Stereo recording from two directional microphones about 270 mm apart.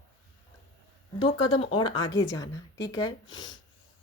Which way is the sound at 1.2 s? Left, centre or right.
Centre.